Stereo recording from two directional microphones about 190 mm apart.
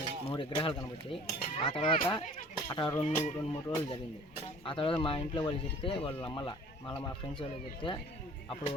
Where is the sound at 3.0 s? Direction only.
30° left (ahead or behind).